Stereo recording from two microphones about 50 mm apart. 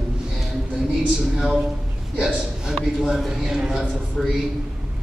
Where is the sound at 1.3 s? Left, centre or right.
Centre.